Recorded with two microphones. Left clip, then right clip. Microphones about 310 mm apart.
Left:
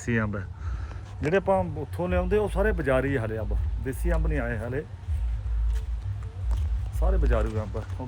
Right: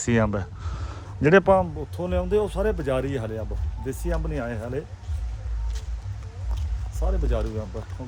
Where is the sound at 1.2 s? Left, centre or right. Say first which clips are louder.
Right 6 dB; right.